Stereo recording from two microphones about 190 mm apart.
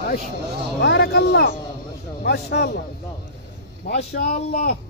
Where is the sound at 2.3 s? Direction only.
60° left (ahead or behind).